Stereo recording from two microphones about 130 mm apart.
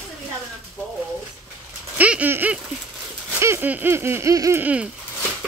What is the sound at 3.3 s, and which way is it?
Speech, 20° right (ahead or behind).